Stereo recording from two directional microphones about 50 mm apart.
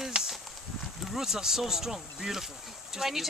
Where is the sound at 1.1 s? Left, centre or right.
Centre.